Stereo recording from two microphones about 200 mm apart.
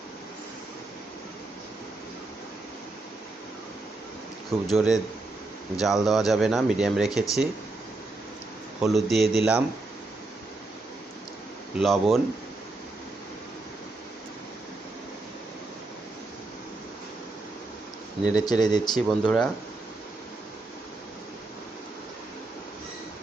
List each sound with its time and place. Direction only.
4.6 s speech: centre (ahead or behind)
8.8 s speech: centre (ahead or behind)
11.8 s speech: centre (ahead or behind)
18.3 s speech: 20° left (ahead or behind)
18.9 s speech: 5° left (ahead or behind)